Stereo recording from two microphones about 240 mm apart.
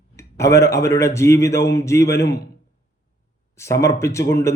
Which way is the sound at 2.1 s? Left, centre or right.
Left.